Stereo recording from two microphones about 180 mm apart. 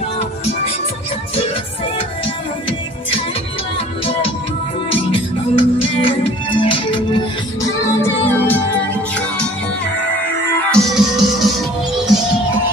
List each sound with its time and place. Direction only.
5.1 s music: 30° left (ahead or behind)
8.0 s music: 10° left (ahead or behind)
10.7 s music: centre (ahead or behind)